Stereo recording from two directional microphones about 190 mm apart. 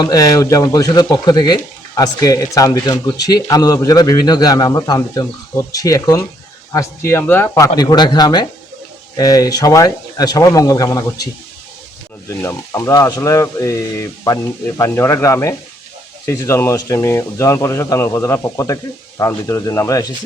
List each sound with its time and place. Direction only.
0.0 s speech: 20° left (ahead or behind)
12.3 s speech: 15° left (ahead or behind)